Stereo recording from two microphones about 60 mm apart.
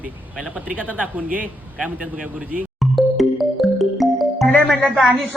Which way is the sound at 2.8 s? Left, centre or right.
Centre.